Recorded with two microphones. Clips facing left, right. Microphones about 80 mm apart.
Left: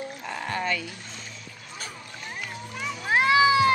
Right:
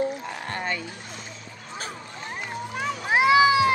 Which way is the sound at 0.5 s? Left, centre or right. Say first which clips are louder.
Left 2 dB; right.